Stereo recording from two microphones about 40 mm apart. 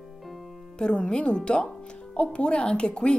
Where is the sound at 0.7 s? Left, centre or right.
Left.